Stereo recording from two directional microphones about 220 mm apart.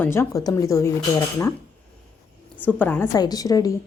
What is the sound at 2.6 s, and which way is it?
Speech, 10° left (ahead or behind).